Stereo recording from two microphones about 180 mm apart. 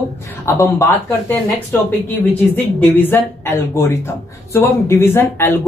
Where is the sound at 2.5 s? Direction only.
10° left (ahead or behind).